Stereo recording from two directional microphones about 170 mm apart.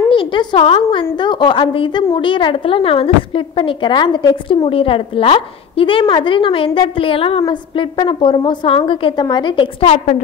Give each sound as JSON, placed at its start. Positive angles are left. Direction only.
{"t": 0.1, "sound": "a woman's voice", "side_deg": 30}